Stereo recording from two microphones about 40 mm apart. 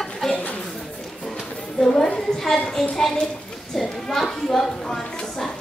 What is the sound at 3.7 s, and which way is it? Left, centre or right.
A woman's voice, centre.